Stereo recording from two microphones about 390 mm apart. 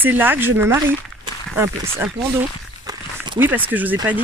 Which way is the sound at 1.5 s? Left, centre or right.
Centre.